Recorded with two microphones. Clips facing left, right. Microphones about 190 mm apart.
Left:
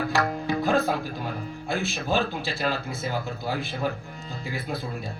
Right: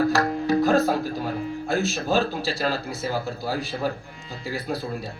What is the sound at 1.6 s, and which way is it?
Speech, 40° right (ahead or behind).